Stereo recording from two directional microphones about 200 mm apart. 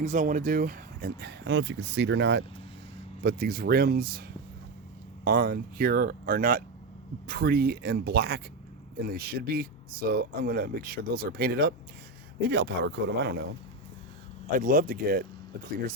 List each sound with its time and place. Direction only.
0.0 s speech: 40° right (ahead or behind); by 2.4 s 60° right (ahead or behind)
3.2 s speech: 50° right (ahead or behind)
14.6 s speech: 40° right (ahead or behind)